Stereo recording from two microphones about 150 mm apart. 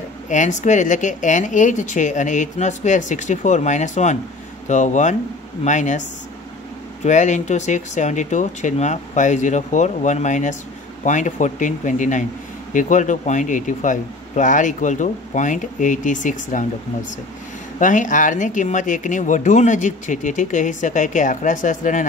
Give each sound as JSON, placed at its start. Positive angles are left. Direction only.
{"t": 0.3, "sound": "speech", "side_deg": 55}
{"t": 7.1, "sound": "speech", "side_deg": 55}
{"t": 17.7, "sound": "speech", "side_deg": 60}